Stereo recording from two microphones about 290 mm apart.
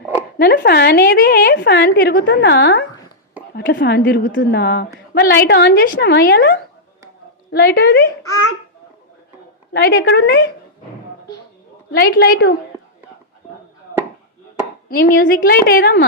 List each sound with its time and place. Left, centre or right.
0.3 s a woman's voice: left
9.7 s a woman's voice: left
11.9 s a woman's voice: left
14.8 s a woman's voice: left